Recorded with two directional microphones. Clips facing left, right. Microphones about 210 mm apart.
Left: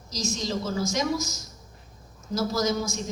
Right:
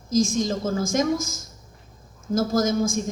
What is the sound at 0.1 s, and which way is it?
A woman's voice, 50° right (ahead or behind).